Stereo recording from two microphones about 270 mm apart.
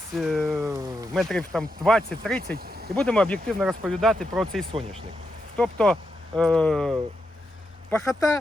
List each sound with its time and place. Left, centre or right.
0.2 s speech: centre
0.6 s a sound: centre
1.1 s speech: centre
2.6 s speech: right
2.9 s speech: centre